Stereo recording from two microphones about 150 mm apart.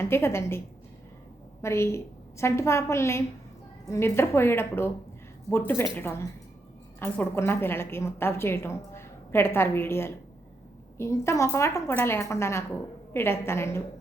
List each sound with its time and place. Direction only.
0.0 s a woman's voice: 15° left (ahead or behind)
1.6 s a woman's voice: 20° left (ahead or behind)